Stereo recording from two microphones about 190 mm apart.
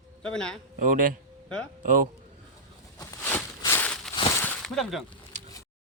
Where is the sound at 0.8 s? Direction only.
45° right (ahead or behind).